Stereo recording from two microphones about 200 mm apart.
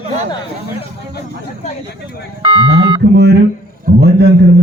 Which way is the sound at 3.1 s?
55° right (ahead or behind).